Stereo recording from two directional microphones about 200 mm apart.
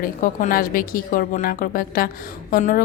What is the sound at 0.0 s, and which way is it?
Speech, 45° left (ahead or behind).